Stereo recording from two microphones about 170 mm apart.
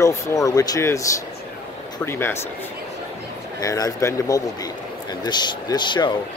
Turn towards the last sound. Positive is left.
turn(degrees=25)  # may be behind; listen again after turning